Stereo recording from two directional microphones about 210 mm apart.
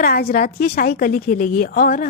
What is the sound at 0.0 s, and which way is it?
Speech, 45° left (ahead or behind).